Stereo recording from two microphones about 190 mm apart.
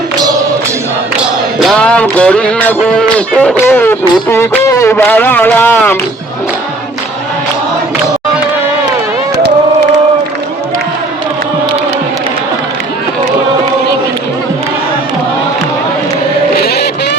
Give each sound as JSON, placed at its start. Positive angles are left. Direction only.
{"t": 1.5, "sound": "speech", "side_deg": 0}
{"t": 16.6, "sound": "music", "side_deg": 60}